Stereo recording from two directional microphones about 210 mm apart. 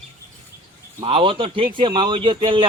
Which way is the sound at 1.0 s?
25° right (ahead or behind).